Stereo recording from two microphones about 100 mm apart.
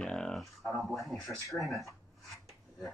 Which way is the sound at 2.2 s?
Centre (ahead or behind).